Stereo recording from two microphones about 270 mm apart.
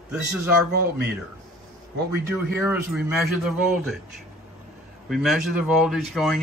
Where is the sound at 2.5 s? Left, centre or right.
Centre.